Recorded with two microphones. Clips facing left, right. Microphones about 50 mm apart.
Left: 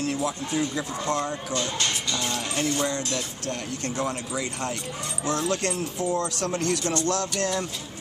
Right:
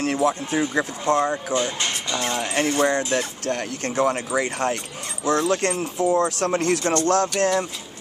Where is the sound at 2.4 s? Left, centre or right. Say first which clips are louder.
Right 7 dB; right.